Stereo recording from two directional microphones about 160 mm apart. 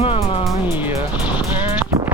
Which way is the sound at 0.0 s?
35° left (ahead or behind).